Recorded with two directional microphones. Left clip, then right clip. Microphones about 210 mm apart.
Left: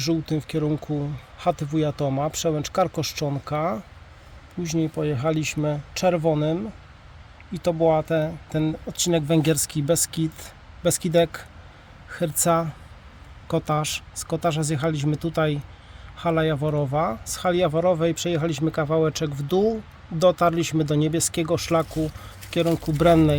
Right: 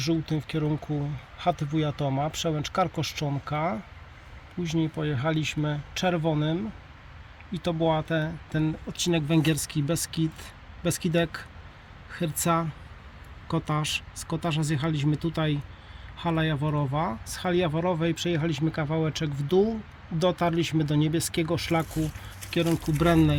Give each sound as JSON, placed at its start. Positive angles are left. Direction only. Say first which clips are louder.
{"t": 0.0, "sound": "speech", "louder": "left 3 dB", "side_deg": 35}